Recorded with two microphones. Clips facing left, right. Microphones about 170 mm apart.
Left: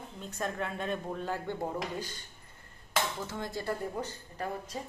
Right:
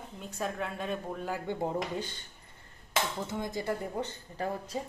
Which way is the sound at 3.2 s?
15° right (ahead or behind).